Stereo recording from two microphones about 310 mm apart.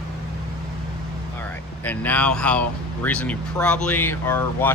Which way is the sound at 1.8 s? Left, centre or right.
Centre.